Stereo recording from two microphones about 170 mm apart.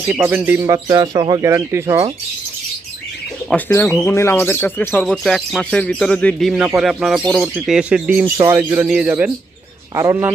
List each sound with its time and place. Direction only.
0.1 s speech: 10° right (ahead or behind)
0.9 s speech: 25° right (ahead or behind)
3.5 s speech: 10° left (ahead or behind); by 10.3 s 15° right (ahead or behind)